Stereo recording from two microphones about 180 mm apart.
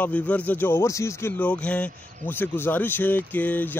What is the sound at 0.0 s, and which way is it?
Speech, 10° left (ahead or behind).